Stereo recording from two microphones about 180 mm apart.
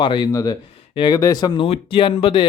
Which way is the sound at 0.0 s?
25° left (ahead or behind).